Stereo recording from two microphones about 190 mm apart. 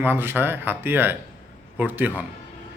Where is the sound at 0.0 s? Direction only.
10° right (ahead or behind).